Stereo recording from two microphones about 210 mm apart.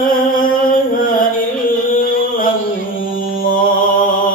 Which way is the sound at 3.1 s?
40° left (ahead or behind).